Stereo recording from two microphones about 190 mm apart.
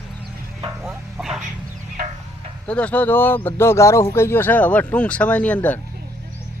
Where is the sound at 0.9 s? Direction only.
Centre (ahead or behind).